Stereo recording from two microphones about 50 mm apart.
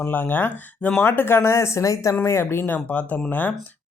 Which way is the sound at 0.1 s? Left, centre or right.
Left.